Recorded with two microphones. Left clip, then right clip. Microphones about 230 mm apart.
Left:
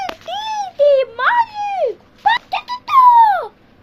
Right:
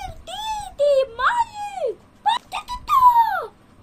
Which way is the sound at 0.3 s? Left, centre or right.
Right.